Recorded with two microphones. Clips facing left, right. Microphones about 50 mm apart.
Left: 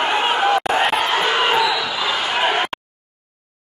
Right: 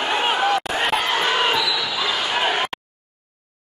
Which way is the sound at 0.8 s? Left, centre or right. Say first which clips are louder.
Left 2 dB; centre.